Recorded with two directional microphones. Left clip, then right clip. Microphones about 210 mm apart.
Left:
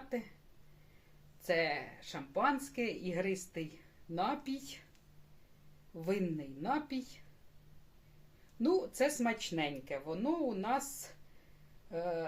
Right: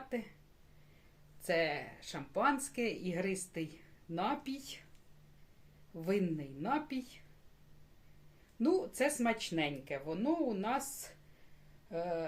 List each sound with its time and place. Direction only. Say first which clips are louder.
0.1 s speech: left 1 dB; 10° right (ahead or behind)
1.4 s speech: even; 10° right (ahead or behind)
6.0 s speech: right 1 dB; 10° right (ahead or behind)
8.6 s speech: even; 10° right (ahead or behind)